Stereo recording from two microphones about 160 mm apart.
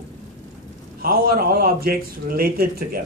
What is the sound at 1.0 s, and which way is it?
A man's voice, 70° right (ahead or behind).